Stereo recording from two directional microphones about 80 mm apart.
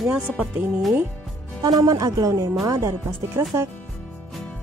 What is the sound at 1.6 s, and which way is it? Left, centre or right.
Speech, right.